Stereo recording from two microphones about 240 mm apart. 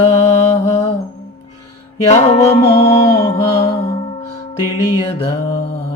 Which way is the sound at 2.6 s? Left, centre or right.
Left.